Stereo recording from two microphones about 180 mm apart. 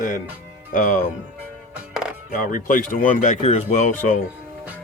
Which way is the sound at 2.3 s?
45° left (ahead or behind).